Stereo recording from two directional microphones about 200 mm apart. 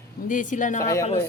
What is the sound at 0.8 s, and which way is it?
Speech, 15° left (ahead or behind).